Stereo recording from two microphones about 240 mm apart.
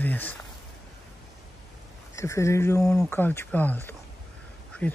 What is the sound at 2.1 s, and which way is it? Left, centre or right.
Speech, centre.